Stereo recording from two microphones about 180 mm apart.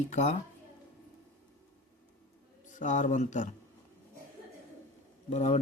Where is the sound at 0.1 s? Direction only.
40° left (ahead or behind).